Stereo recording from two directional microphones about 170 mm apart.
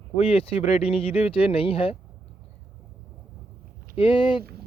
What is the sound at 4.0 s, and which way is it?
Speech, 30° left (ahead or behind).